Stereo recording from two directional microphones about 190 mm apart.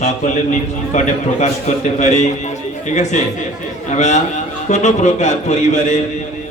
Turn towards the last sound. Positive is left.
turn(degrees=40)  # may be behind; listen again after turning